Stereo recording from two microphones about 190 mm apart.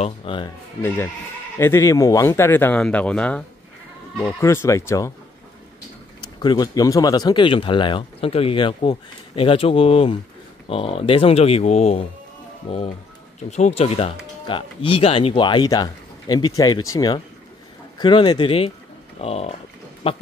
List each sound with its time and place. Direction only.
0.0 s speech: 30° left (ahead or behind)
0.8 s speech: 10° left (ahead or behind)
6.4 s speech: 20° left (ahead or behind)